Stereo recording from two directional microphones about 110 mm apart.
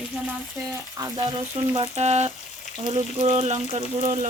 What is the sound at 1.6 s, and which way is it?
Speech, 90° right.